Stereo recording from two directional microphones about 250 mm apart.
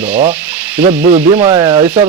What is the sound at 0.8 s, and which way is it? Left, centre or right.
Speech, right.